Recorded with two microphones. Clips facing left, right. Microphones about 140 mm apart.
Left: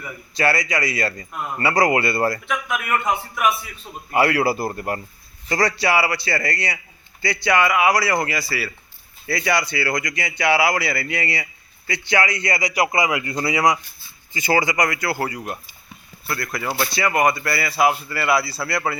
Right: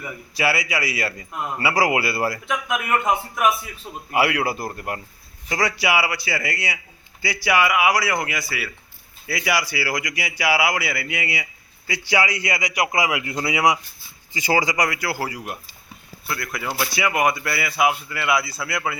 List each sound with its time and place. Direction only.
0.0 s a man's voice: 5° right (ahead or behind)
2.5 s a man's voice: 20° right (ahead or behind)
4.1 s a man's voice: 5° right (ahead or behind)